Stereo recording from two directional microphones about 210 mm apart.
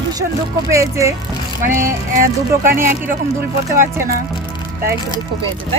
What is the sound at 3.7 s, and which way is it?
Speech, 10° right (ahead or behind).